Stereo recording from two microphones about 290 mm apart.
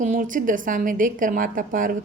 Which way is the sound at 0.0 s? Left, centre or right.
Right.